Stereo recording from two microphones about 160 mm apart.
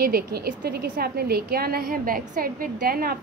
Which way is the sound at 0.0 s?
70° right (ahead or behind).